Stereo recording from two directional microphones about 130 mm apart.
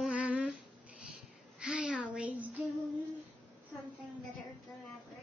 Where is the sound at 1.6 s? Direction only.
5° right (ahead or behind).